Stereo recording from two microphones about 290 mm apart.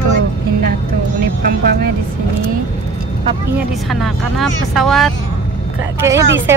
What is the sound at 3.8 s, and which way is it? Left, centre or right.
Speech, centre.